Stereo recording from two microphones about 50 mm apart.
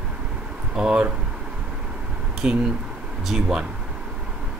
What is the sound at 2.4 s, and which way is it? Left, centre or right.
Speech, right.